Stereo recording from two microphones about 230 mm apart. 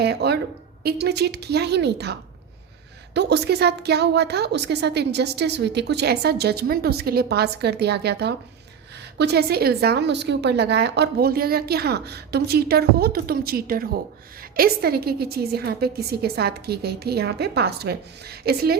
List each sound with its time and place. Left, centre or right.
0.0 s a woman's voice: right
3.2 s a woman's voice: right